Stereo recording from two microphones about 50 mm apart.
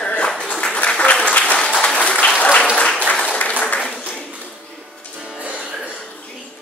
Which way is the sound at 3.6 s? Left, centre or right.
Left.